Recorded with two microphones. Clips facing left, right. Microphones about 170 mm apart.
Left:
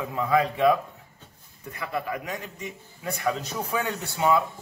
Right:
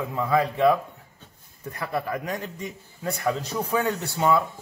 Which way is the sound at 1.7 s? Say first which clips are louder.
Right 2 dB; 40° right (ahead or behind).